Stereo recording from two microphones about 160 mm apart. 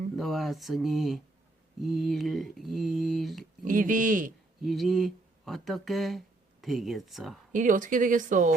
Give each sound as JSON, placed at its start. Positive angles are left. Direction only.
{"t": 0.2, "sound": "speech", "side_deg": 0}
{"t": 3.6, "sound": "speech", "side_deg": -55}
{"t": 4.6, "sound": "speech", "side_deg": 0}
{"t": 7.5, "sound": "speech", "side_deg": -55}